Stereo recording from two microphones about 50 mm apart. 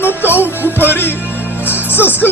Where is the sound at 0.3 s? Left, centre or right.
Left.